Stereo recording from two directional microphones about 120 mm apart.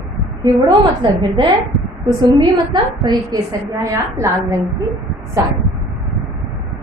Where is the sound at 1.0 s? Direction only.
35° right (ahead or behind).